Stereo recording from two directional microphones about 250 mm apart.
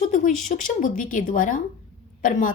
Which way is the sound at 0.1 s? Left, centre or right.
Left.